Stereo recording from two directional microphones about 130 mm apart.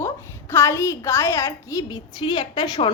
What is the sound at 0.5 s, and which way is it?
Speech, 20° left (ahead or behind).